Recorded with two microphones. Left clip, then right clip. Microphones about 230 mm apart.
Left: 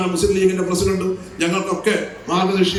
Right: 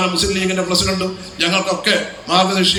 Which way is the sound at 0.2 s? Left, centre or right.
Centre.